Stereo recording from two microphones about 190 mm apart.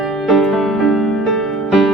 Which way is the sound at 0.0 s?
Centre (ahead or behind).